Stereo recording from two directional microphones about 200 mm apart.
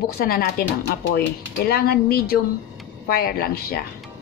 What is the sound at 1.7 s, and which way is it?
A woman's voice, 50° left (ahead or behind).